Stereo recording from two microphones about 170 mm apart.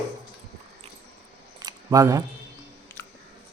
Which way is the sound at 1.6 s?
20° right (ahead or behind).